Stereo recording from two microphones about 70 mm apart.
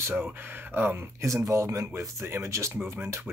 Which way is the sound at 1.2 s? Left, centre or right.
Right.